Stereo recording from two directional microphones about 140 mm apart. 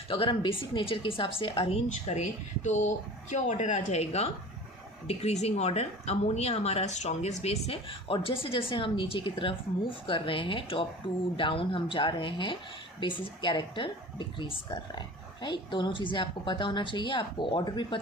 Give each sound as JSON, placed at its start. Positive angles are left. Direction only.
{"t": 0.1, "sound": "a woman's voice", "side_deg": 35}
{"t": 1.9, "sound": "a woman's voice", "side_deg": 55}